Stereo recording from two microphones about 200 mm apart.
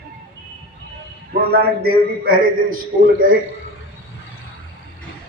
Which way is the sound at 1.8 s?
45° right (ahead or behind).